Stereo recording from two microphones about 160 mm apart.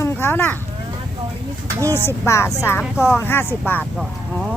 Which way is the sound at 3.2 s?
15° left (ahead or behind).